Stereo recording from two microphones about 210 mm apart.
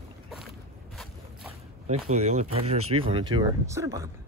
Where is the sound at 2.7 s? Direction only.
90° right.